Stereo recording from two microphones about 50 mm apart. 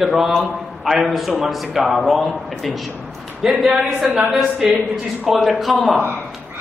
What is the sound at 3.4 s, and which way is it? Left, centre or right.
Speech, centre.